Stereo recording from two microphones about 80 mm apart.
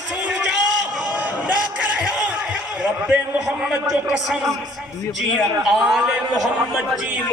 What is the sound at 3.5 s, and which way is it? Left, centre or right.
Speech, centre.